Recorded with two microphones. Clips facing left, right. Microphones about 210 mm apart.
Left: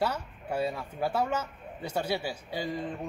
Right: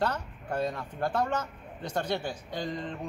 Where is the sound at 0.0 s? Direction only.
10° left (ahead or behind).